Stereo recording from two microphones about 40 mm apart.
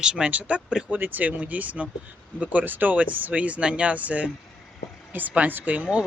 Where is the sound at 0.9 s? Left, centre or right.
Right.